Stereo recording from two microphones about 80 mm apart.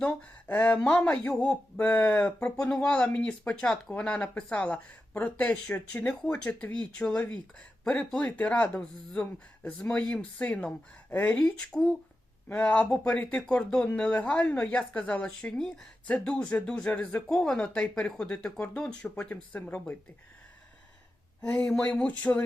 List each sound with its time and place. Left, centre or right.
0.0 s speech: centre
21.5 s speech: centre